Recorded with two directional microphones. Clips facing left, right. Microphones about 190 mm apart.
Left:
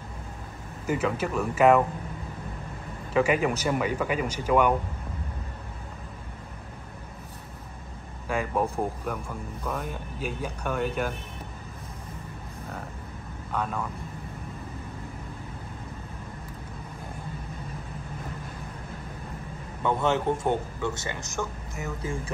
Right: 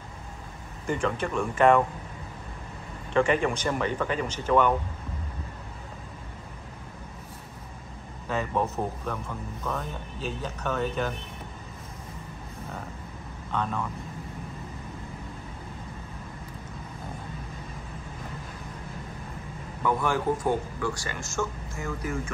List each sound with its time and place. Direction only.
0.8 s speech: 5° left (ahead or behind)
3.1 s speech: 5° left (ahead or behind)
8.3 s speech: 10° left (ahead or behind)
13.5 s speech: 5° left (ahead or behind)
19.8 s speech: 25° left (ahead or behind)